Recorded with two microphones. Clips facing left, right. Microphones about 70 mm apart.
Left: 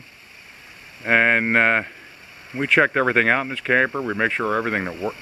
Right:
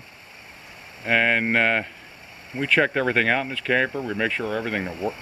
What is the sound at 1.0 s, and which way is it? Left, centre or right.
Speech, left.